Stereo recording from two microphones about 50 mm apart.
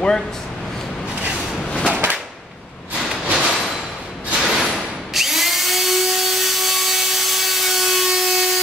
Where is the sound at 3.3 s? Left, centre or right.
Centre.